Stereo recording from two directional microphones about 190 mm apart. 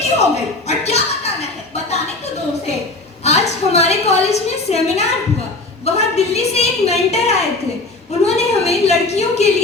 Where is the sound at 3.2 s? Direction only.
35° left (ahead or behind).